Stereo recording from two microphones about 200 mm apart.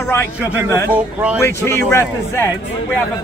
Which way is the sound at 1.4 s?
10° left (ahead or behind).